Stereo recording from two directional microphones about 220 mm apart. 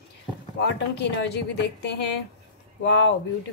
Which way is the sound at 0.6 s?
50° left (ahead or behind).